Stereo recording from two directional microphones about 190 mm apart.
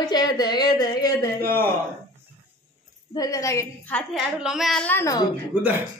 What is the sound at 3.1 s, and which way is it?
Speech, 15° left (ahead or behind).